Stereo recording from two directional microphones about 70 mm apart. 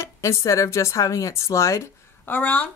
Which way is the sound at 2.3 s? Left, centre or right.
Left.